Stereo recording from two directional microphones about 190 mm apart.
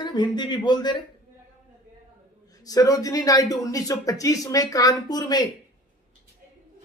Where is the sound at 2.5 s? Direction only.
20° left (ahead or behind).